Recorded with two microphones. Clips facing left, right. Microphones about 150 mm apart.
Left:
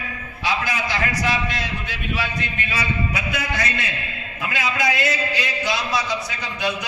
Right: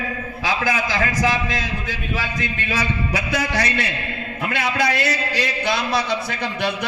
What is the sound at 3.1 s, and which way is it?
Speech, 90° right.